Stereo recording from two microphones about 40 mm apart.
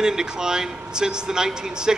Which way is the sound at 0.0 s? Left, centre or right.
Centre.